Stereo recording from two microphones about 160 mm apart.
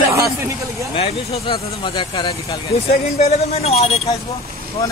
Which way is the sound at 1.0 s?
35° left (ahead or behind).